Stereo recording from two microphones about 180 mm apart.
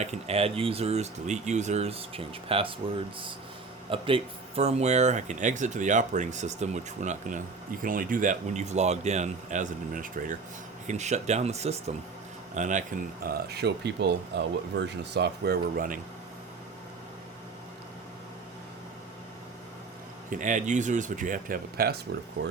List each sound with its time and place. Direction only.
0.0 s speech: 35° right (ahead or behind)
3.8 s speech: 30° right (ahead or behind); by 16.0 s 55° right (ahead or behind)
20.3 s speech: 45° right (ahead or behind); by 22.5 s 60° right (ahead or behind)